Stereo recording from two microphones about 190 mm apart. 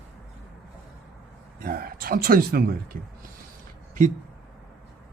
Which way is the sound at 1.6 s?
50° right (ahead or behind).